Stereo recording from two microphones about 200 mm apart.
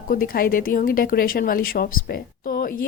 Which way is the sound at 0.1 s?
45° left (ahead or behind).